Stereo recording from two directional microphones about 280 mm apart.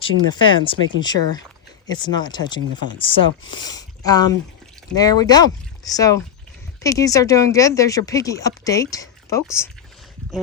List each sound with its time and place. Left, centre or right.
0.0 s speech: centre